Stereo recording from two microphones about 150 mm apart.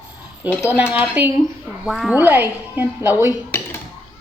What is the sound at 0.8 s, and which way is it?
Speech, 10° right (ahead or behind).